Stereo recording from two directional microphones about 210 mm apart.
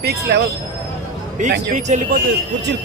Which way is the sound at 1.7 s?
35° right (ahead or behind).